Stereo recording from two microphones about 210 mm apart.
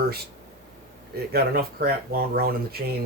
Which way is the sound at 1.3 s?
45° right (ahead or behind).